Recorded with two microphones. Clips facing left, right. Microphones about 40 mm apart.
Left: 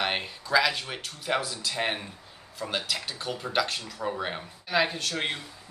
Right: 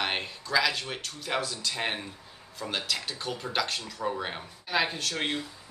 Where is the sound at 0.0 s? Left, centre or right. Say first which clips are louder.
Left 1 dB; centre.